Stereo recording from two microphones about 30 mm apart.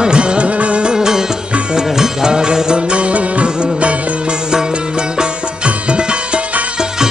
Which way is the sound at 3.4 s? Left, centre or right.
Right.